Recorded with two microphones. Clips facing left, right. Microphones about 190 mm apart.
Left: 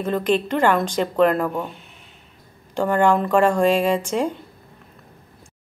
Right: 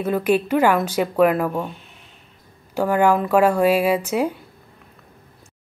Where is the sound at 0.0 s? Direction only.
10° right (ahead or behind).